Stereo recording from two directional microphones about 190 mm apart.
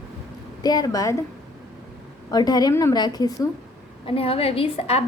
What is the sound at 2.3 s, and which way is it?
A woman's voice, 20° left (ahead or behind).